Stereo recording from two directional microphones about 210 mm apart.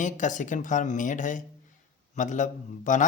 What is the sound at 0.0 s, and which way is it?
Speech, 35° left (ahead or behind).